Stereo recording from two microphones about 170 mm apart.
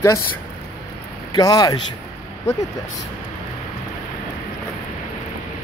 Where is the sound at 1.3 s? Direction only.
25° left (ahead or behind).